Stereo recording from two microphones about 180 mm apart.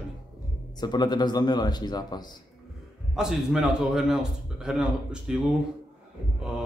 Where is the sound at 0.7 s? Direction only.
25° left (ahead or behind).